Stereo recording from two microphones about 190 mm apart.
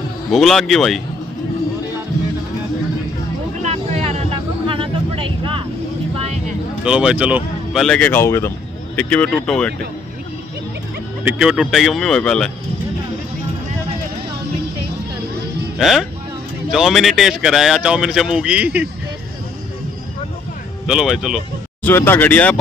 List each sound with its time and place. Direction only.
0.3 s speech: centre (ahead or behind)
3.6 s a sound: 35° right (ahead or behind)
6.8 s speech: 5° right (ahead or behind)
11.2 s speech: 5° right (ahead or behind)
15.8 s speech: centre (ahead or behind)
20.8 s speech: 5° right (ahead or behind)
21.8 s speech: 10° left (ahead or behind)